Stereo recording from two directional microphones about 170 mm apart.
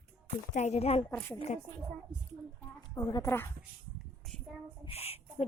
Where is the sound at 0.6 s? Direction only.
40° left (ahead or behind).